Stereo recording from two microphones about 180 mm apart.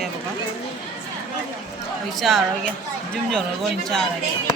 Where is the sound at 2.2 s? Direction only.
Centre (ahead or behind).